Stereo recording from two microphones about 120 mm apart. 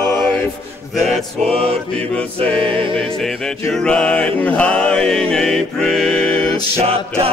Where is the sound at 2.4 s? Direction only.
50° right (ahead or behind).